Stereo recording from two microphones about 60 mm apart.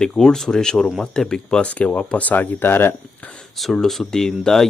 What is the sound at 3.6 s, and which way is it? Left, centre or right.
Speech, centre.